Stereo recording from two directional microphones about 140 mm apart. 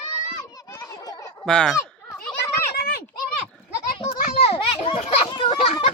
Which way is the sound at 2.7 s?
90° left.